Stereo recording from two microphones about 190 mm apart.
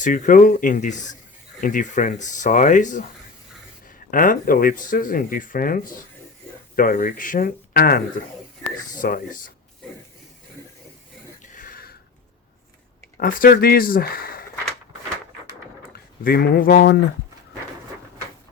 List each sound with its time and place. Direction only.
0.0 s speech: 45° left (ahead or behind)
11.4 s a sound: 45° left (ahead or behind)
13.1 s speech: 50° left (ahead or behind)
16.2 s speech: 50° left (ahead or behind)